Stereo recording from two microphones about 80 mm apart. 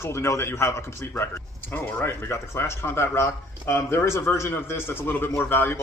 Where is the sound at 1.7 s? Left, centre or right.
Left.